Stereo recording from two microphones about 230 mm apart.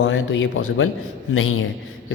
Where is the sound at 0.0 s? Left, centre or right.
Left.